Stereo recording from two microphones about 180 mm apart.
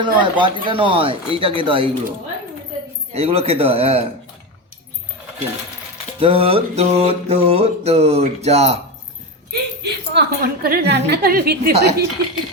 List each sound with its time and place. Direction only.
0.0 s speech: 25° right (ahead or behind)
3.1 s mantra: 35° right (ahead or behind)
6.1 s mantra: 30° right (ahead or behind)
9.5 s a woman's voice: 65° right (ahead or behind)